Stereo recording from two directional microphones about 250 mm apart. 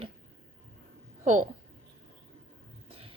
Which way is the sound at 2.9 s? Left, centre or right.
Right.